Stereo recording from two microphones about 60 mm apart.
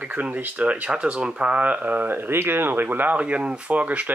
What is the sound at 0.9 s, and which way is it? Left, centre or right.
Speech, centre.